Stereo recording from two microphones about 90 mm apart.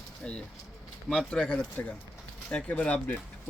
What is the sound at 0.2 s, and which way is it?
A man's voice, 10° left (ahead or behind).